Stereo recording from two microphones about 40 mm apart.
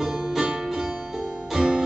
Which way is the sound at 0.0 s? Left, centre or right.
Centre.